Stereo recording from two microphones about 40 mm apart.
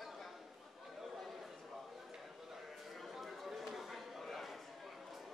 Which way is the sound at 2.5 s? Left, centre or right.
Centre.